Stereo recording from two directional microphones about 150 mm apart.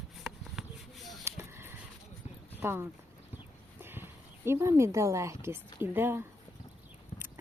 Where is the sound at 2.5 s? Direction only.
15° right (ahead or behind).